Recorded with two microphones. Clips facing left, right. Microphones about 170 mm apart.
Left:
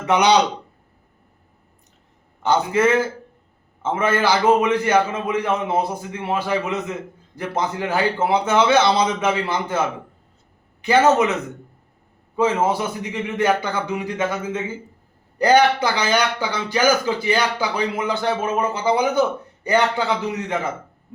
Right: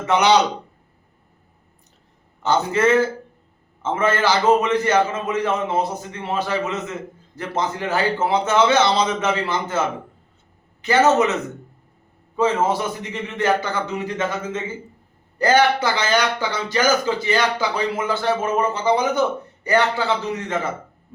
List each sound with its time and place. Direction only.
0.1 s speech: 15° left (ahead or behind)
2.4 s speech: 10° left (ahead or behind)
10.8 s speech: 15° left (ahead or behind)
12.4 s speech: 10° left (ahead or behind)